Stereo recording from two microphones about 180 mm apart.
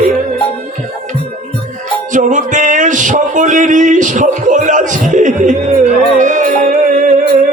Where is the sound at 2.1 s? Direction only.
45° right (ahead or behind).